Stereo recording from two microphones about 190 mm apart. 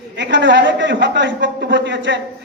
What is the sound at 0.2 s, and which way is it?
A man's voice, 70° right (ahead or behind).